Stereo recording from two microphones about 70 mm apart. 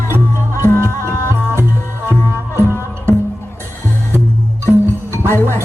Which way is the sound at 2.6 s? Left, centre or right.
Right.